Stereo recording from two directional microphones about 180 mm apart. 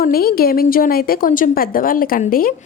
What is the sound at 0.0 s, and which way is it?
A woman's voice, 55° left (ahead or behind).